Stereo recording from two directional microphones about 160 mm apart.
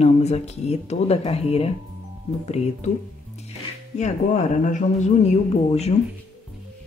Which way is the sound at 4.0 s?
45° left (ahead or behind).